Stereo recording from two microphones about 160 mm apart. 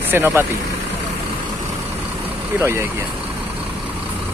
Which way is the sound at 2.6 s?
15° right (ahead or behind).